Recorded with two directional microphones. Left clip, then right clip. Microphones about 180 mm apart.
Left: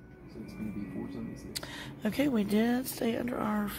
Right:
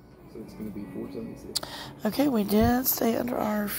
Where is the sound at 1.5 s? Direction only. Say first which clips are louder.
Right 8 dB; 5° right (ahead or behind).